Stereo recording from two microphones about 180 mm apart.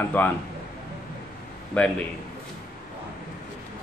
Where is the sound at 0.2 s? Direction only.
10° left (ahead or behind).